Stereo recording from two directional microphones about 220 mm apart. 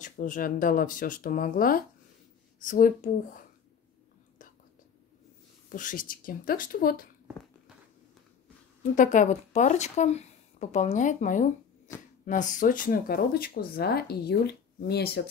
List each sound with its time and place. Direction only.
0.0 s speech: 35° left (ahead or behind)
5.7 s speech: 35° left (ahead or behind)
8.9 s speech: 35° left (ahead or behind)